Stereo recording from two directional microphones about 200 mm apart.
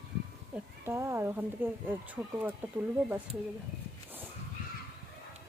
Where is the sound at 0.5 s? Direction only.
10° right (ahead or behind).